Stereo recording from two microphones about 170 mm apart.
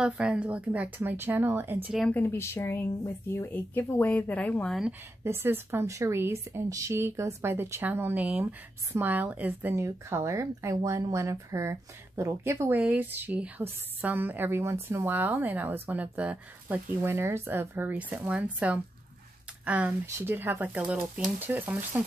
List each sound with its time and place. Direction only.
0.0 s speech: 5° right (ahead or behind)
2.0 s speech: 10° left (ahead or behind)
5.2 s speech: 15° right (ahead or behind)